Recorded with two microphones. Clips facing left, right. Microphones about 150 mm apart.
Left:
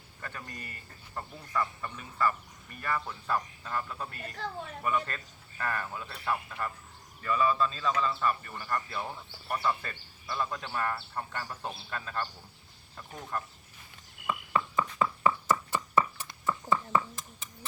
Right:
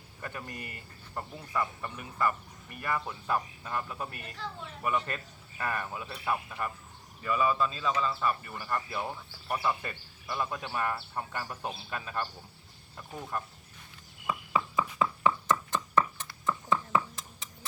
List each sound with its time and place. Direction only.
0.2 s speech: 20° right (ahead or behind)
14.3 s chopping: 5° right (ahead or behind)